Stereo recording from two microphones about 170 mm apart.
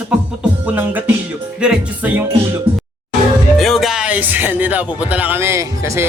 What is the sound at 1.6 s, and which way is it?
Speech, 5° right (ahead or behind).